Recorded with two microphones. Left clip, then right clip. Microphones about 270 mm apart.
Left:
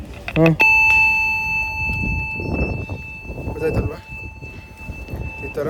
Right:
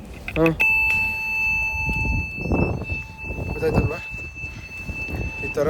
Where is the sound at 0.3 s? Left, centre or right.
Centre.